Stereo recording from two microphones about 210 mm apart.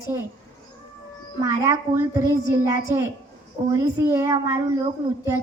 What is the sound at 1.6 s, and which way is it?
Speech, 15° right (ahead or behind).